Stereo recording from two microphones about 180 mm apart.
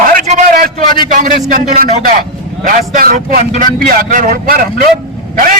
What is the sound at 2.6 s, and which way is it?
A man's voice, 50° right (ahead or behind).